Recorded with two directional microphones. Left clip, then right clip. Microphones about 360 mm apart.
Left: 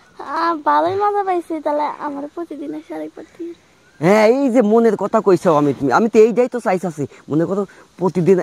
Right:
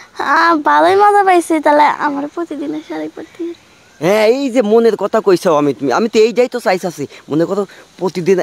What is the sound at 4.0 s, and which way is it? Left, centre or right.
Speech, left.